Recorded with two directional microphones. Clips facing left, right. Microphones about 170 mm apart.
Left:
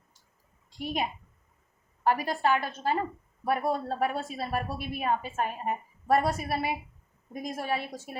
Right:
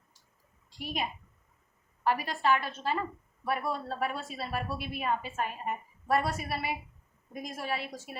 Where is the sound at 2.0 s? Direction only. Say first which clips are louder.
Left 2 dB; 45° left (ahead or behind).